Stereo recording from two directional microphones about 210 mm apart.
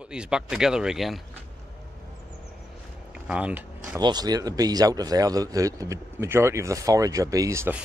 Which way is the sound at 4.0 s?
20° right (ahead or behind).